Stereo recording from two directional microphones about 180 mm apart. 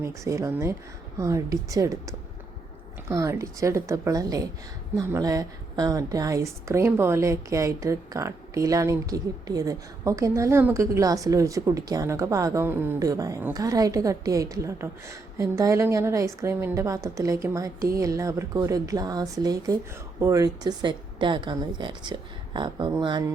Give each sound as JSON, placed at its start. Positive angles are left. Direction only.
{"t": 0.0, "sound": "a woman's voice", "side_deg": -15}